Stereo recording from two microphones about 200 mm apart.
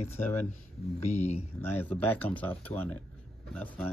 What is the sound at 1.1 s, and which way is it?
Speech, 35° left (ahead or behind).